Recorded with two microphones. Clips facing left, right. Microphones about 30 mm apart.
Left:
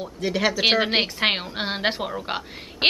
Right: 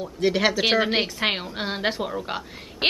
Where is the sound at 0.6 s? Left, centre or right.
Centre.